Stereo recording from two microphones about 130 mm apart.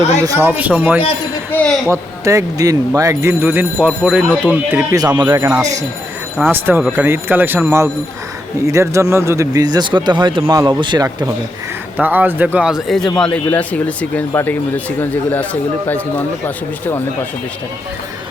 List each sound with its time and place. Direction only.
0.3 s speech: 15° right (ahead or behind)
1.5 s a sound: 15° left (ahead or behind)
1.9 s speech: 25° right (ahead or behind)
4.9 s speech: 30° right (ahead or behind)
6.5 s speech: 15° right (ahead or behind); by 11.3 s 35° right (ahead or behind)
12.0 s speech: 15° right (ahead or behind); by 15.4 s 10° left (ahead or behind)